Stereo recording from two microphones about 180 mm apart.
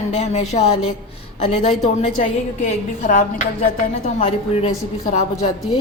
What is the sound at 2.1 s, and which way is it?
A woman's voice, 45° left (ahead or behind).